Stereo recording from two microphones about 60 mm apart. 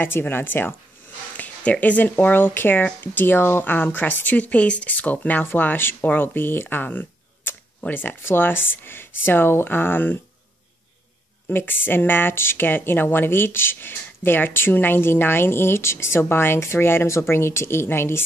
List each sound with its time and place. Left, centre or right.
0.0 s speech: left
1.3 s speech: left
11.4 s speech: left